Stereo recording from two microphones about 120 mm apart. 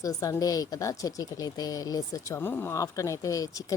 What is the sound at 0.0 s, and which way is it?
Speech, 30° left (ahead or behind).